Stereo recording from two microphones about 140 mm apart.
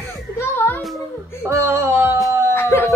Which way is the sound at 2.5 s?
15° left (ahead or behind).